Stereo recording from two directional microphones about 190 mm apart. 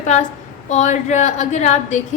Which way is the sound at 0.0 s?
40° left (ahead or behind).